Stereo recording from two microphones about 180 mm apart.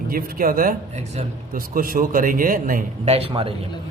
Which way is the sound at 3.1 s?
35° right (ahead or behind).